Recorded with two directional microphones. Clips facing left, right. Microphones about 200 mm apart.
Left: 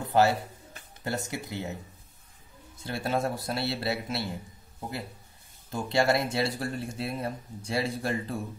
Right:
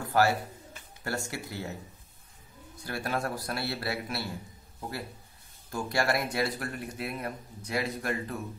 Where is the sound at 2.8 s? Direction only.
25° left (ahead or behind).